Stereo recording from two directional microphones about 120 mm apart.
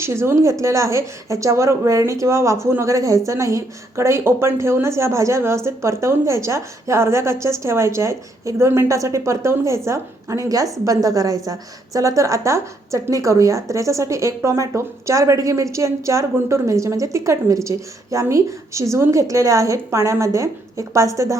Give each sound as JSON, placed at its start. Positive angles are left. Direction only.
{"t": 0.0, "sound": "speech", "side_deg": -20}